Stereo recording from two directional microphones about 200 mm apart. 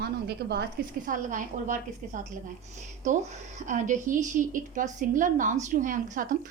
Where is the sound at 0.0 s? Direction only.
55° right (ahead or behind); by 2.2 s 40° right (ahead or behind).